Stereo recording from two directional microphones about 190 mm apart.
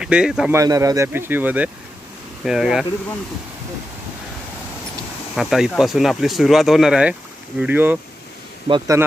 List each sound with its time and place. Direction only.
0.0 s speech: 5° right (ahead or behind)
0.6 s speech: 15° right (ahead or behind); by 2.9 s centre (ahead or behind)
5.3 s speech: centre (ahead or behind)
8.6 s speech: 25° right (ahead or behind)